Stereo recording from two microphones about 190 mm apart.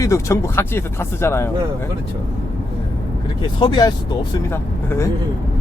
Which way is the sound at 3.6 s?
20° left (ahead or behind).